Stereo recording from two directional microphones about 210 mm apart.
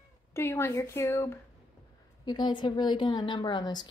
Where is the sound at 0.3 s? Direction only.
10° left (ahead or behind).